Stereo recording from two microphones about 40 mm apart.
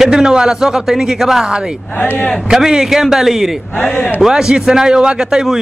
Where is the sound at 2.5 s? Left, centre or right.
Centre.